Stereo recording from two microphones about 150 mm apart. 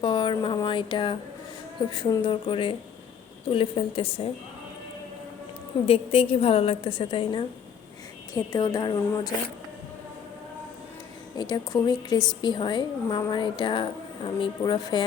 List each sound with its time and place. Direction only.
0.0 s a woman's voice: 30° left (ahead or behind)
5.8 s a woman's voice: 40° left (ahead or behind)
11.3 s a woman's voice: 25° left (ahead or behind)